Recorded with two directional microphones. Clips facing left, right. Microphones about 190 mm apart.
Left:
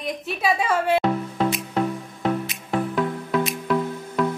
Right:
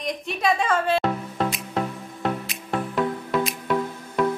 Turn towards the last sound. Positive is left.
turn(degrees=0)  # may be behind; listen again after turning